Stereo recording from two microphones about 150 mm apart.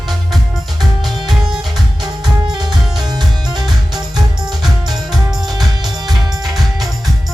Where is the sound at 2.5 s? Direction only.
30° right (ahead or behind).